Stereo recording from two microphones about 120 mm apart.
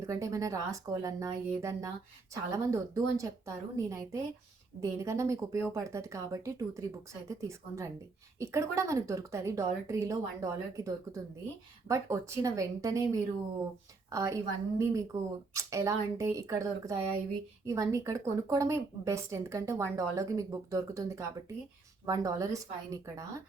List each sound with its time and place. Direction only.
0.0 s speech: 25° right (ahead or behind)